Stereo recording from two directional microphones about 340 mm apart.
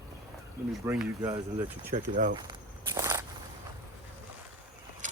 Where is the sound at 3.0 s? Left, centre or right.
Centre.